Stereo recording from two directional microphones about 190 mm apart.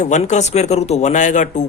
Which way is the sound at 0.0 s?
40° left (ahead or behind).